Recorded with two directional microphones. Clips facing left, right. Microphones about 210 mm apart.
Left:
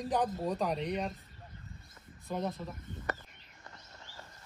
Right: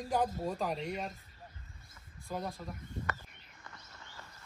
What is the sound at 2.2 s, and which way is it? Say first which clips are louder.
Speech: left 3 dB; centre (ahead or behind).